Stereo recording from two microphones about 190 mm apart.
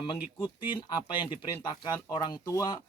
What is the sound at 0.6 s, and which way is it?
Speech, 25° left (ahead or behind).